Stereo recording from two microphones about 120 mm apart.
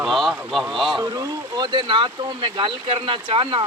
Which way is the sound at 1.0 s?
30° right (ahead or behind).